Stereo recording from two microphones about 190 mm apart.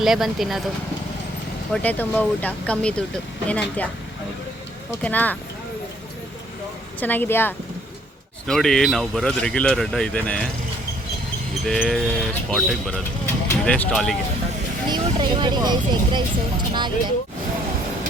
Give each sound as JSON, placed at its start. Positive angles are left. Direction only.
{"t": 0.0, "sound": "speech", "side_deg": 0}
{"t": 1.7, "sound": "speech", "side_deg": 10}
{"t": 5.0, "sound": "speech", "side_deg": 10}
{"t": 7.0, "sound": "speech", "side_deg": 10}
{"t": 11.6, "sound": "speech", "side_deg": 0}
{"t": 14.8, "sound": "speech", "side_deg": -25}